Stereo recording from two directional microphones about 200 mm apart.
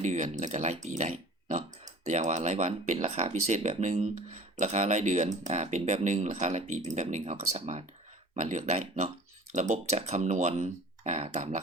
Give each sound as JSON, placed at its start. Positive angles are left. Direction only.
{"t": 0.0, "sound": "speech", "side_deg": -35}